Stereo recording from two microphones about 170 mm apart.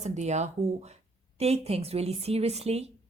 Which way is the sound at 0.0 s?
40° right (ahead or behind).